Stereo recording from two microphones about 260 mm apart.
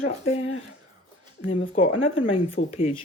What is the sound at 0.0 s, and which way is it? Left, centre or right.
Speech, left.